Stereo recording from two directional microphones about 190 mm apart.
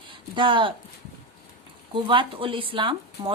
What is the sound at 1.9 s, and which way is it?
Speech, 25° right (ahead or behind).